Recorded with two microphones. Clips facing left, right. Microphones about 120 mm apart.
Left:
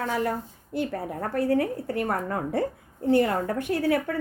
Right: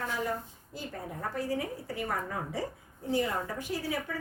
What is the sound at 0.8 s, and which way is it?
A woman's voice, 65° left (ahead or behind).